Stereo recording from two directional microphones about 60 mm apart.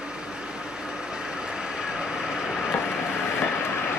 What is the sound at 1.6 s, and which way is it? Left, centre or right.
Vehicle, centre.